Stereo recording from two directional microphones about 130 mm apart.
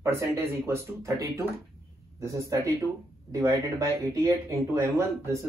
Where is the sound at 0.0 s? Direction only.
20° right (ahead or behind).